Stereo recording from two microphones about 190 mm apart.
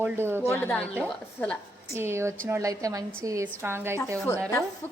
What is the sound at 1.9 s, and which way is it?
A woman's voice, 15° right (ahead or behind).